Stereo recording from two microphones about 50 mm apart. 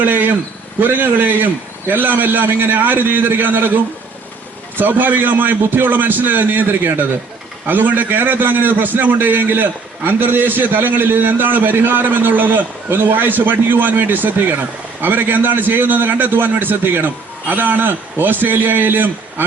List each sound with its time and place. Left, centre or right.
0.0 s a man's voice: right
4.8 s a man's voice: right